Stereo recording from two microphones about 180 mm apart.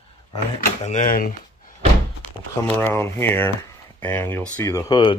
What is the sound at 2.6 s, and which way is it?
Speech, 10° left (ahead or behind).